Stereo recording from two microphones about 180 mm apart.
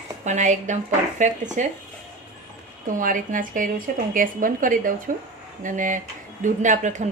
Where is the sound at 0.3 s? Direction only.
40° right (ahead or behind).